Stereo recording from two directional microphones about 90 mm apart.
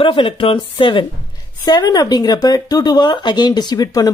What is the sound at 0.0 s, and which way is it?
Speech, 75° left (ahead or behind).